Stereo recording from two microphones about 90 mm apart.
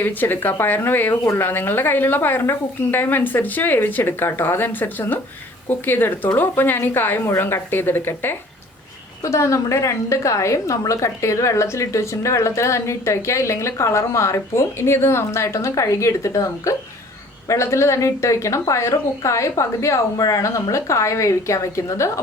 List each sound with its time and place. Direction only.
0.0 s speech: 20° left (ahead or behind)
9.2 s a woman's voice: 35° left (ahead or behind)